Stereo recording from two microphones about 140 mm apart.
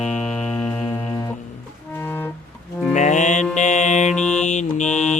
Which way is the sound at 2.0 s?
15° left (ahead or behind).